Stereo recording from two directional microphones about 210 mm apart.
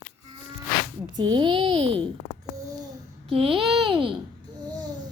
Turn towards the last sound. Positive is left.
turn(degrees=-20)  # may be behind; listen again after turning